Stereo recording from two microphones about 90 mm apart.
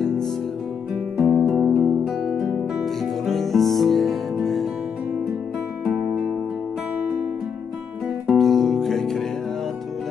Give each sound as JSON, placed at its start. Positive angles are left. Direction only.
{"t": 1.1, "sound": "music", "side_deg": -10}
{"t": 1.7, "sound": "music", "side_deg": -35}
{"t": 2.3, "sound": "music", "side_deg": 0}
{"t": 8.4, "sound": "music", "side_deg": 0}